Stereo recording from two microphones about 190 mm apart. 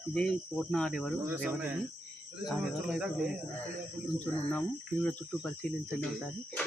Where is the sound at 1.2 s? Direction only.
5° right (ahead or behind).